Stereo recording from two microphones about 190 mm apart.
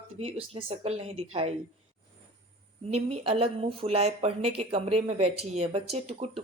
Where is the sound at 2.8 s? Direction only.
30° right (ahead or behind).